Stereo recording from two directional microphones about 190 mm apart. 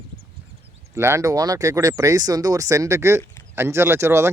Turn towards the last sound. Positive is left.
turn(degrees=-15)  # may be behind; listen again after turning